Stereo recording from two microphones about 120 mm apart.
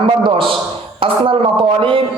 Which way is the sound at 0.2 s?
45° right (ahead or behind).